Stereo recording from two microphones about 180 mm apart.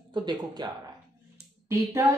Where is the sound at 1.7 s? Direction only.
15° right (ahead or behind).